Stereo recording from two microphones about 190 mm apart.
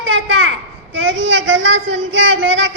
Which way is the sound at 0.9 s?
85° right.